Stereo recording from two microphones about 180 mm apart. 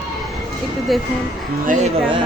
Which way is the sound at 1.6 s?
45° right (ahead or behind).